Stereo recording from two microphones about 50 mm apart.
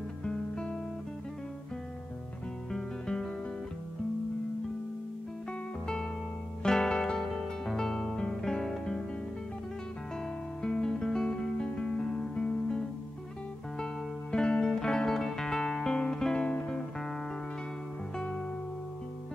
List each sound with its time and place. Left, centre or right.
0.2 s music: centre
2.7 s music: centre
6.6 s music: centre
10.6 s music: centre
14.3 s music: centre